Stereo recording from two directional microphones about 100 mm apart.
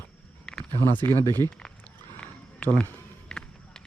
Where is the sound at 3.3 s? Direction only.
10° left (ahead or behind).